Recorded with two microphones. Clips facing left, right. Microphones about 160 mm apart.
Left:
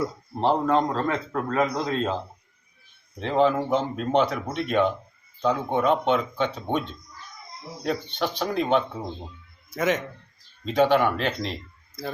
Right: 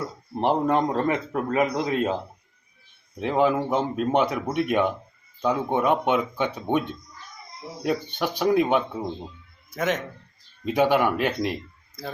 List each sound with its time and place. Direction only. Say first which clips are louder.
0.3 s speech: even; 15° right (ahead or behind)
3.2 s speech: even; 10° right (ahead or behind)
7.9 s speech: right 1 dB; 10° right (ahead or behind)
9.7 s speech: left 1 dB; centre (ahead or behind)
10.7 s speech: even; 10° right (ahead or behind)